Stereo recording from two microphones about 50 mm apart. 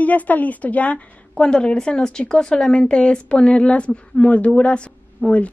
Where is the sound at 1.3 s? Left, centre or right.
Centre.